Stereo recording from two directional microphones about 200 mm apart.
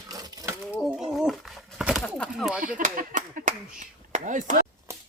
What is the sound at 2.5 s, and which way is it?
Speech, 5° right (ahead or behind).